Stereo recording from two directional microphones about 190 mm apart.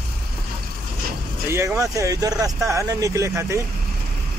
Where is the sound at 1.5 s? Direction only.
15° right (ahead or behind).